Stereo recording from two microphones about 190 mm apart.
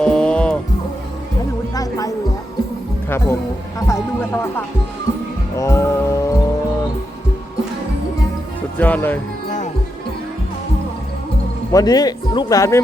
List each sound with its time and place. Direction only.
0.0 s music: 5° left (ahead or behind)
1.7 s music: 20° left (ahead or behind)
3.1 s speech: 15° left (ahead or behind)
5.5 s music: 15° left (ahead or behind)
8.8 s speech: 10° left (ahead or behind)
11.7 s speech: 20° left (ahead or behind)